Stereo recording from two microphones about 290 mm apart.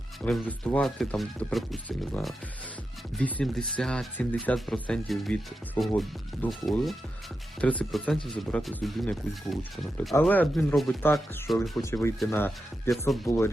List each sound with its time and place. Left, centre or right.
0.3 s speech: centre